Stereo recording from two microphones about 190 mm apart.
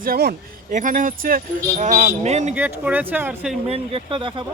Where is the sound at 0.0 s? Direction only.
50° right (ahead or behind); by 2.5 s 35° right (ahead or behind).